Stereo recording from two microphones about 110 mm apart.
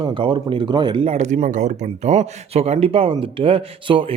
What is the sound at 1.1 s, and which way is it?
Speech, 85° right.